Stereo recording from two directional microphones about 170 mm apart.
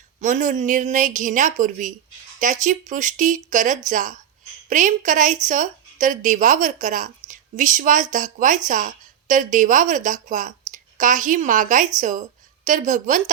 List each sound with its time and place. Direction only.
0.2 s a woman's voice: 50° right (ahead or behind)